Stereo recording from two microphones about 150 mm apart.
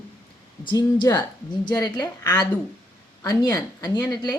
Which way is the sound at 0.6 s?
30° left (ahead or behind).